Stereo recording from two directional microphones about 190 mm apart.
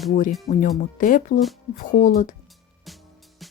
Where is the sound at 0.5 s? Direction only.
35° left (ahead or behind).